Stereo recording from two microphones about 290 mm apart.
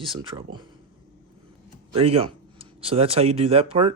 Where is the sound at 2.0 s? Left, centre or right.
Centre.